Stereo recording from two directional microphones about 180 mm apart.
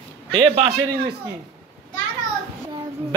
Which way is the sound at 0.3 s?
30° right (ahead or behind).